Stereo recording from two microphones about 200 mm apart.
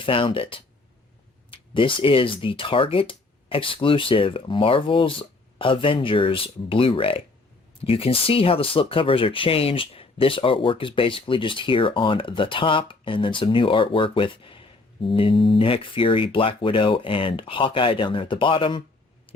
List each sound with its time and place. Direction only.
0.0 s speech: 25° left (ahead or behind)